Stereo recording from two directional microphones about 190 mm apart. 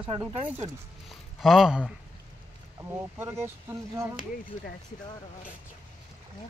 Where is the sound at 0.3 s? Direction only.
35° right (ahead or behind).